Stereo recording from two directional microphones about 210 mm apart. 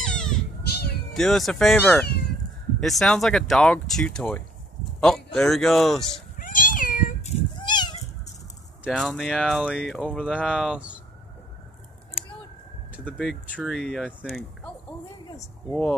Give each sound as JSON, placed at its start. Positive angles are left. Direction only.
{"t": 0.0, "sound": "cat", "side_deg": 5}
{"t": 0.7, "sound": "cat", "side_deg": 50}
{"t": 1.1, "sound": "speech", "side_deg": 0}
{"t": 2.0, "sound": "cat", "side_deg": 50}
{"t": 2.8, "sound": "speech", "side_deg": 0}
{"t": 6.3, "sound": "cat", "side_deg": 40}
{"t": 8.8, "sound": "speech", "side_deg": 0}
{"t": 13.0, "sound": "speech", "side_deg": 0}